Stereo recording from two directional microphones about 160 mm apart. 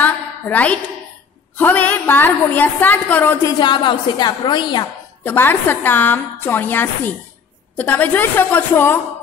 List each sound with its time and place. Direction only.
0.0 s a sound: 10° left (ahead or behind)
1.6 s a woman's voice: 10° left (ahead or behind)
3.5 s a woman's voice: 30° left (ahead or behind)
5.2 s a woman's voice: 10° left (ahead or behind)